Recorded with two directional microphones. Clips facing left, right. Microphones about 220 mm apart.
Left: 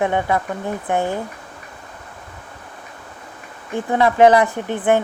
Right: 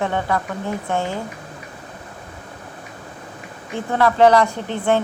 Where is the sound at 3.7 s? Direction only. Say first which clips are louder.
Left 2 dB; 15° left (ahead or behind).